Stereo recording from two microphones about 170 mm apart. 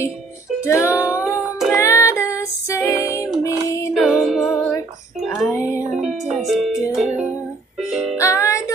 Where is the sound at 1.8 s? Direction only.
15° left (ahead or behind).